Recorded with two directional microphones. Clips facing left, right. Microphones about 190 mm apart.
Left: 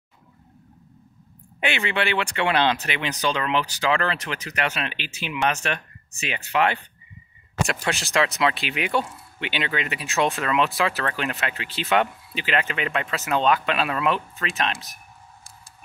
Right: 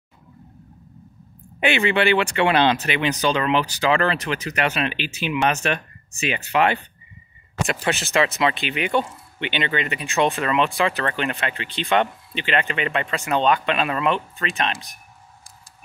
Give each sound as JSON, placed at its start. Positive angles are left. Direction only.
{"t": 1.8, "sound": "speech", "side_deg": -15}
{"t": 7.6, "sound": "speech", "side_deg": 0}